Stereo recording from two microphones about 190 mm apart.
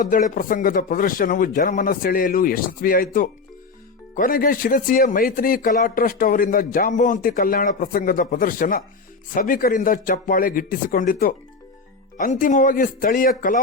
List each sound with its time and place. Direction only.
0.0 s speech: 45° left (ahead or behind)